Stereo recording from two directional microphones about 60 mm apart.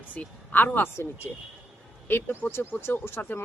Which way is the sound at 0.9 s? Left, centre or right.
Left.